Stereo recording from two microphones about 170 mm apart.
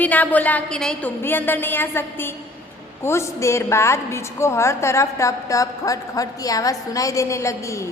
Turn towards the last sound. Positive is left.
turn(degrees=15)  # may be behind; listen again after turning